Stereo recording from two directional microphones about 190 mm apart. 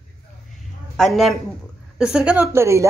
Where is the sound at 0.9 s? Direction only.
Centre (ahead or behind).